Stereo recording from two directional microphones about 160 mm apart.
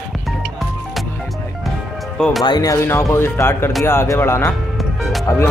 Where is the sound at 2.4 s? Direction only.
25° left (ahead or behind).